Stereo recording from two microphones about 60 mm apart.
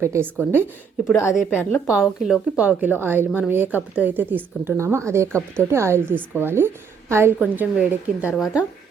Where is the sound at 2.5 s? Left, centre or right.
Right.